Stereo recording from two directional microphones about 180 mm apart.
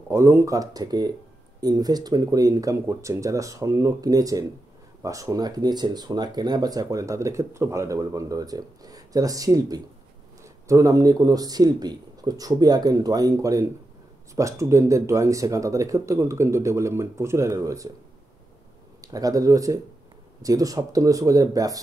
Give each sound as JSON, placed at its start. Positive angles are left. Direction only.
{"t": 0.1, "sound": "speech", "side_deg": -15}
{"t": 18.9, "sound": "speech", "side_deg": -20}